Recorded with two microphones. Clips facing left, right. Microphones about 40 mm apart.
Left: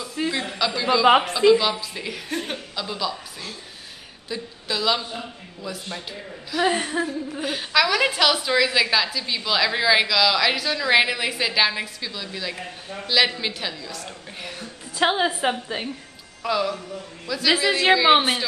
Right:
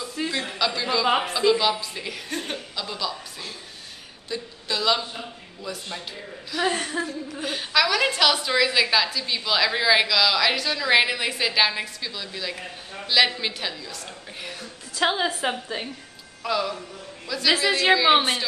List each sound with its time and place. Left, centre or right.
0.1 s a sound: centre
1.1 s speech: left
1.5 s a woman's voice: centre